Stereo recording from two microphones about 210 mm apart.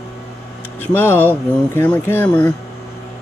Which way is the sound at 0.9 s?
10° left (ahead or behind).